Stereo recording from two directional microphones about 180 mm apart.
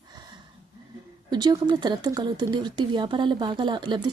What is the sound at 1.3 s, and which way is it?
Speech, 25° right (ahead or behind).